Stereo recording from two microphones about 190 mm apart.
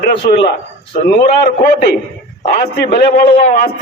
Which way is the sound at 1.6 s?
55° left (ahead or behind).